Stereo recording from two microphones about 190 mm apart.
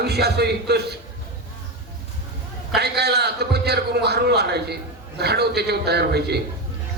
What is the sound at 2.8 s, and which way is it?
A man's voice, 60° right (ahead or behind).